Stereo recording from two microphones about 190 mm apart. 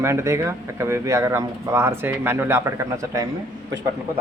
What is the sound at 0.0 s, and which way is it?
Speech, 15° right (ahead or behind).